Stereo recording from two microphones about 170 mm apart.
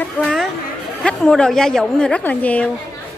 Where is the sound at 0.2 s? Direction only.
5° left (ahead or behind).